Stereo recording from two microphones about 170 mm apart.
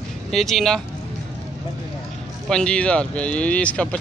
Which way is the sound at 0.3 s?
Centre (ahead or behind).